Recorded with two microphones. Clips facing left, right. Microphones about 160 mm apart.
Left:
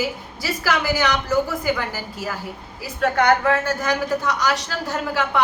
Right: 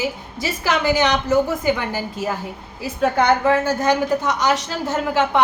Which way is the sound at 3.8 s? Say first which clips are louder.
Right 4 dB; 20° right (ahead or behind).